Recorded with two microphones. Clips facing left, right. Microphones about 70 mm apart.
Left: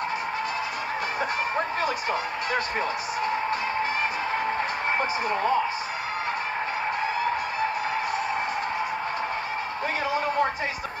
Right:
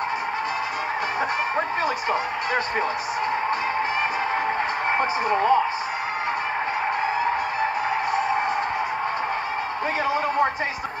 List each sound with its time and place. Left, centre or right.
4.9 s speech: right